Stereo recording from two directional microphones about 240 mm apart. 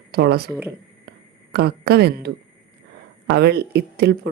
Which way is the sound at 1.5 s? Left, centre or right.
Right.